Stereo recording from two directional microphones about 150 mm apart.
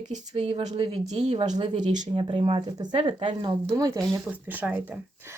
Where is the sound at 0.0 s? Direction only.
55° right (ahead or behind).